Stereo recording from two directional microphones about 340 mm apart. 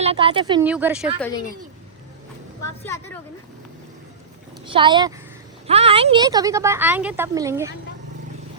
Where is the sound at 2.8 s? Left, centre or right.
Centre.